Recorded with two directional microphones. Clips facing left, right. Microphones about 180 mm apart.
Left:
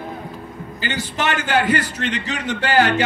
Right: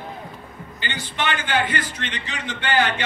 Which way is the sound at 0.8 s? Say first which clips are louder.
Left 4 dB; 40° left (ahead or behind).